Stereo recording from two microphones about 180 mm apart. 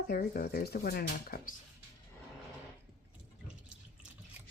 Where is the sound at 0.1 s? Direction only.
55° left (ahead or behind).